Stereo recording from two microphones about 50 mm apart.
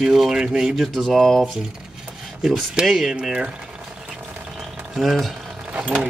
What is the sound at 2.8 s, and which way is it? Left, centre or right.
Speech, centre.